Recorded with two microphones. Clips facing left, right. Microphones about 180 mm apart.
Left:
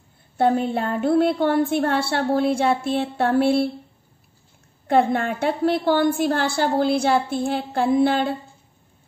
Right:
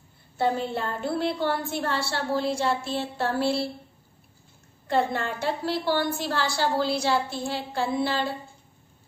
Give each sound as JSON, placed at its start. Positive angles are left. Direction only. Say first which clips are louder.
{"t": 0.4, "sound": "a woman's voice", "louder": "left 6 dB", "side_deg": 55}
{"t": 4.8, "sound": "a woman's voice", "louder": "left 6 dB", "side_deg": 55}